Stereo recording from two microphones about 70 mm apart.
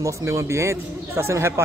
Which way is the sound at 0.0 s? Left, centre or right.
Right.